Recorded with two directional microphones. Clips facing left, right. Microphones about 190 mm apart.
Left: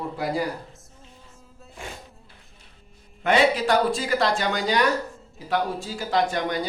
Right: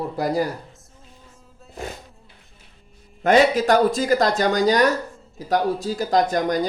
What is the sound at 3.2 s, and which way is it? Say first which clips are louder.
A man's voice: right 4 dB; 40° right (ahead or behind).